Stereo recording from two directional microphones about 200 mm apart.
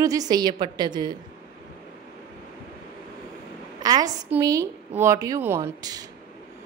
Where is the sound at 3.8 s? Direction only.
20° right (ahead or behind).